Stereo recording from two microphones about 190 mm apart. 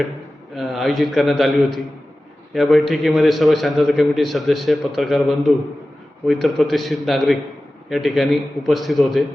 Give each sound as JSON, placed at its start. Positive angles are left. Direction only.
{"t": 0.5, "sound": "a man's voice", "side_deg": 0}